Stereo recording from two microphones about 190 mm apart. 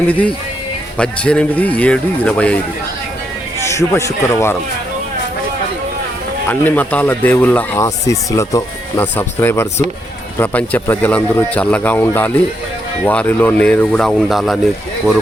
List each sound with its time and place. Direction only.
0.1 s speech: 10° left (ahead or behind)
3.7 s speech: 15° left (ahead or behind)
6.5 s speech: 10° left (ahead or behind)